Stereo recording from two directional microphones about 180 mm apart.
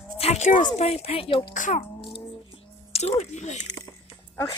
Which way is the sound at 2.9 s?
35° left (ahead or behind).